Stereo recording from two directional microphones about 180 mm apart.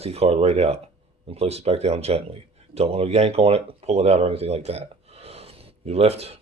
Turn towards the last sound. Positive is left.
turn(degrees=-35)  # may be behind; listen again after turning